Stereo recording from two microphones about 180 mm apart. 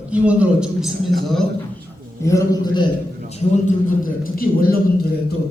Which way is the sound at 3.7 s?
50° left (ahead or behind).